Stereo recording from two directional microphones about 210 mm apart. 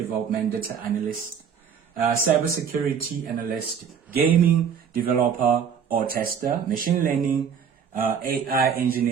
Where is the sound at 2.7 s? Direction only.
45° right (ahead or behind).